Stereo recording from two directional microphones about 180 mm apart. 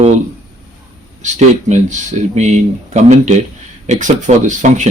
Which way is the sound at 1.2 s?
40° right (ahead or behind).